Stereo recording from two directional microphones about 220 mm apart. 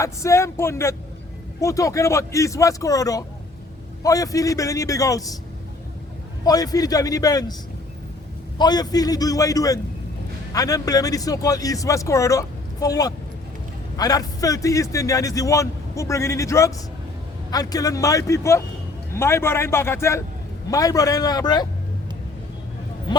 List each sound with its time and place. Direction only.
0.0 s a man's voice: 15° left (ahead or behind)
6.4 s a man's voice: 15° left (ahead or behind)
8.5 s a man's voice: 20° left (ahead or behind)